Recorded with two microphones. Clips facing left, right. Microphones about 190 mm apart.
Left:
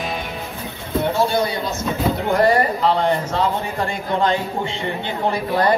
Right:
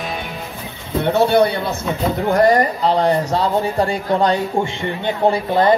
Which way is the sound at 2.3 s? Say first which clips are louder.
Right 2 dB; 40° right (ahead or behind).